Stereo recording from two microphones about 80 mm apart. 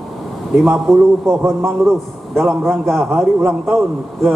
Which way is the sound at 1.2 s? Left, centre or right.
Right.